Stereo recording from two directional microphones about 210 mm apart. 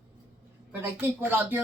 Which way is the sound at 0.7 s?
10° right (ahead or behind).